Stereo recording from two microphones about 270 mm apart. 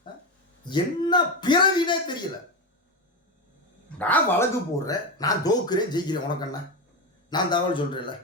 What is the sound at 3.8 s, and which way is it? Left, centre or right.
Speech, centre.